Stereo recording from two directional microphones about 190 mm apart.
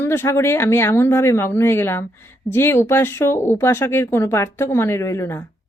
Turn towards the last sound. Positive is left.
turn(degrees=15)  # may be behind; listen again after turning